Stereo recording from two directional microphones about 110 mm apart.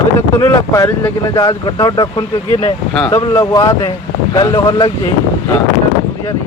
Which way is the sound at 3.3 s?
25° left (ahead or behind).